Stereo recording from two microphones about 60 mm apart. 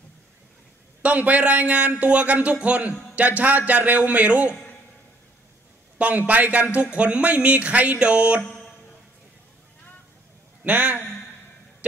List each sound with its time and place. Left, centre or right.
1.0 s speech: right
5.9 s speech: right
10.6 s a man's voice: right